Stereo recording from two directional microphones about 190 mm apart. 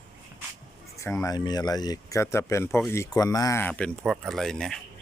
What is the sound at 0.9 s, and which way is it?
Speech, 15° left (ahead or behind).